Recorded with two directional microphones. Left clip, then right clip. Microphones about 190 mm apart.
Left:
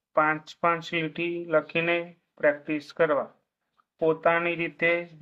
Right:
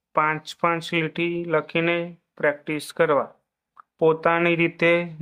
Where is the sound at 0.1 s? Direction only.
30° right (ahead or behind).